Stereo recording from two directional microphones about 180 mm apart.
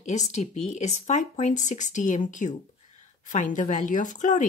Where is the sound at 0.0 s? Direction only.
40° left (ahead or behind).